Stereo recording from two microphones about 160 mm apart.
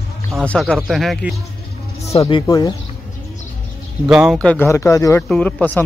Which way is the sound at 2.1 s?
35° left (ahead or behind).